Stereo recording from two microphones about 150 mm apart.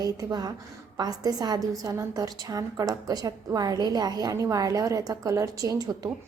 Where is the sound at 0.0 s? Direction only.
25° right (ahead or behind).